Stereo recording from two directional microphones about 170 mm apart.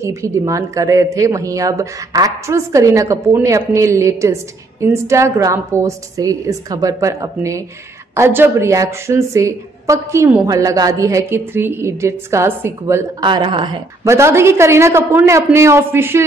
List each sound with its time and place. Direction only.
0.0 s a woman's voice: 15° right (ahead or behind)
13.2 s a woman's voice: 30° right (ahead or behind)
14.0 s a woman's voice: 15° right (ahead or behind)